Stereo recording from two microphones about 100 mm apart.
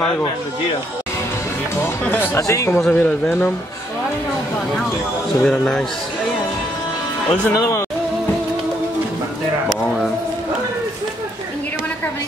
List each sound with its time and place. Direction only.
1.8 s speech: 20° left (ahead or behind)
2.9 s speech: 15° left (ahead or behind)
5.4 s speech: 10° left (ahead or behind)
7.2 s speech: 10° left (ahead or behind)